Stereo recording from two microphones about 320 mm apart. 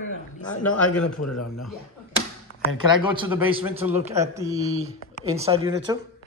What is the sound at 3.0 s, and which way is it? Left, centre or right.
A man's voice, centre.